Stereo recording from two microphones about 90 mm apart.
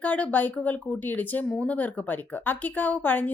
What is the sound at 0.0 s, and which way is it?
A woman's voice, 15° left (ahead or behind).